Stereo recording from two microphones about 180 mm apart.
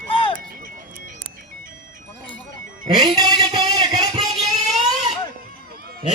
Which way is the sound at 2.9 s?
20° right (ahead or behind).